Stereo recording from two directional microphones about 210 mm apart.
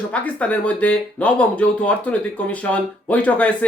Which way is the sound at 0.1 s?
5° left (ahead or behind).